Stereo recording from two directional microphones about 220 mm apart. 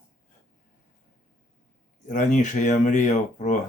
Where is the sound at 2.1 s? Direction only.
35° left (ahead or behind).